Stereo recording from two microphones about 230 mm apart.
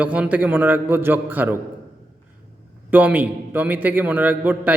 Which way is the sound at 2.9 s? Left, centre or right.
Centre.